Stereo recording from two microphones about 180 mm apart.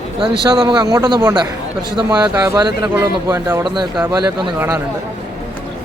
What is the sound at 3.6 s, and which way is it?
Speech, 25° right (ahead or behind).